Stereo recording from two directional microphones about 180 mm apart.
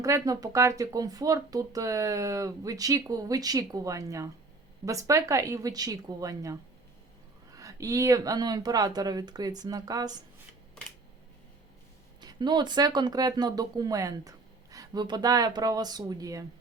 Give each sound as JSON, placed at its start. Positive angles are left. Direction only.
{"t": 0.0, "sound": "a woman's voice", "side_deg": -20}
{"t": 12.2, "sound": "speech", "side_deg": -25}